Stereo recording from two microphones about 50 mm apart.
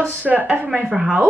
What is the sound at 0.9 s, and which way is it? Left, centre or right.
Speech, centre.